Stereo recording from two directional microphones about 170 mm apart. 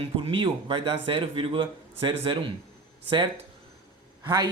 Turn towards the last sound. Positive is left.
turn(degrees=-25)  # may be behind; listen again after turning